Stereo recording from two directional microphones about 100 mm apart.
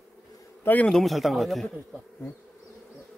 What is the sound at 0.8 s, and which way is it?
Speech, centre (ahead or behind).